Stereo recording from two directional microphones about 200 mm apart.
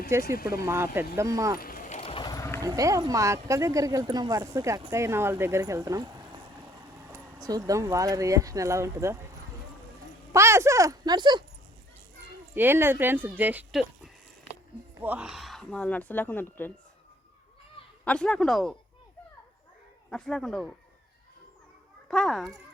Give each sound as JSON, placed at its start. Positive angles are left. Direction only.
{"t": 0.1, "sound": "speech", "side_deg": -15}
{"t": 0.3, "sound": "speech", "side_deg": 50}
{"t": 0.6, "sound": "speech", "side_deg": -10}
{"t": 1.5, "sound": "a sound", "side_deg": 45}
{"t": 2.0, "sound": "sheep", "side_deg": 25}
{"t": 2.6, "sound": "speech", "side_deg": -15}
{"t": 7.4, "sound": "speech", "side_deg": -15}
{"t": 10.3, "sound": "speech", "side_deg": -15}
{"t": 12.5, "sound": "speech", "side_deg": -10}
{"t": 18.0, "sound": "speech", "side_deg": 5}
{"t": 20.1, "sound": "speech", "side_deg": 5}
{"t": 22.1, "sound": "speech", "side_deg": 5}